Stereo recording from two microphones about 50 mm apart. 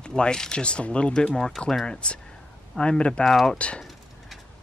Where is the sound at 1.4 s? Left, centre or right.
Centre.